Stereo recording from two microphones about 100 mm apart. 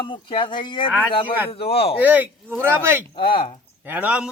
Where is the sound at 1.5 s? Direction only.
75° left (ahead or behind).